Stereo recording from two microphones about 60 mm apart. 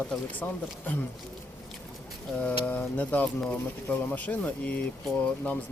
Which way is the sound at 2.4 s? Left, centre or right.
Left.